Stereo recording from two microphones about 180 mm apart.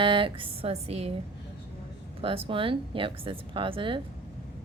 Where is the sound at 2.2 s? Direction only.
30° right (ahead or behind).